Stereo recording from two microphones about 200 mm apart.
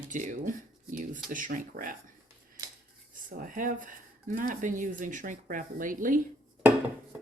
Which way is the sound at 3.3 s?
40° right (ahead or behind).